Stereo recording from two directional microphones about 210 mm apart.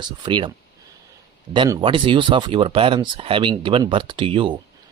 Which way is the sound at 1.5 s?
20° right (ahead or behind).